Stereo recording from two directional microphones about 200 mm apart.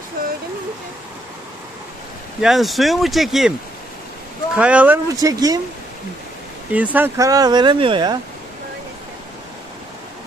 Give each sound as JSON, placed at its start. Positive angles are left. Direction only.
{"t": 2.4, "sound": "speech", "side_deg": 0}
{"t": 4.6, "sound": "speech", "side_deg": -5}
{"t": 6.7, "sound": "speech", "side_deg": -10}